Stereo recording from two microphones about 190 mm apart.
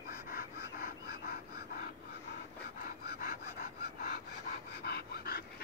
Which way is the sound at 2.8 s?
50° left (ahead or behind).